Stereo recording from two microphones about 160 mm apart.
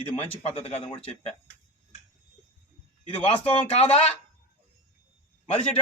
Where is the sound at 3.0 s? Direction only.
40° left (ahead or behind).